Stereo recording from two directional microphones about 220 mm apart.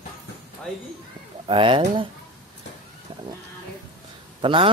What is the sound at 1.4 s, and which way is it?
Speech, 25° right (ahead or behind).